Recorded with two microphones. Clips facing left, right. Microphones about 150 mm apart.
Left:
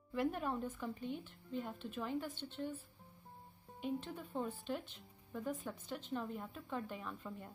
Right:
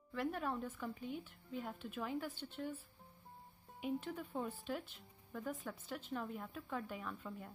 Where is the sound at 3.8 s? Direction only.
5° right (ahead or behind).